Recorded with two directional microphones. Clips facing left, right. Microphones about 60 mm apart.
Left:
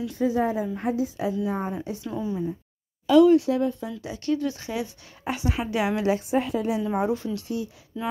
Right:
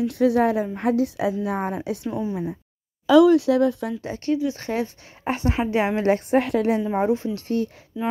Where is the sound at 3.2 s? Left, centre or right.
Right.